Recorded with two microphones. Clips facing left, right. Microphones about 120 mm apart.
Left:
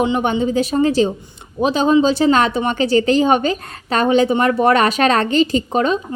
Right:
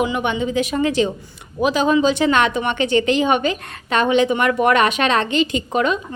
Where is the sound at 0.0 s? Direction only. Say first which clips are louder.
Left 3 dB; 35° left (ahead or behind).